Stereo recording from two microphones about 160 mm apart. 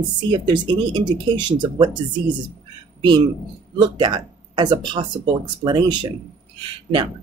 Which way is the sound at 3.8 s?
30° right (ahead or behind).